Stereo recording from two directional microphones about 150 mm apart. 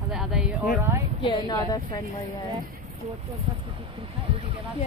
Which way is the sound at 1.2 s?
30° left (ahead or behind).